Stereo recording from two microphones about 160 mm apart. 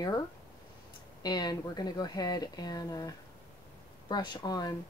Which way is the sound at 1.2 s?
25° left (ahead or behind).